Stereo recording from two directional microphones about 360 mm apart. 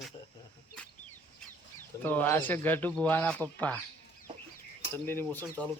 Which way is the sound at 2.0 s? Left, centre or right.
Centre.